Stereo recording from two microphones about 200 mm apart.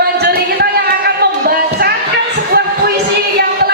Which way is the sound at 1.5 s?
50° right (ahead or behind).